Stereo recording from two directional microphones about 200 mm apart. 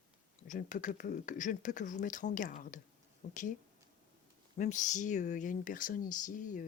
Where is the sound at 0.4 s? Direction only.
40° left (ahead or behind).